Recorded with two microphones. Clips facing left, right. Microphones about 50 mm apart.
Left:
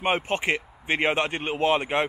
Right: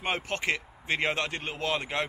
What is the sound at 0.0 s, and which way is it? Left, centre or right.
Speech, left.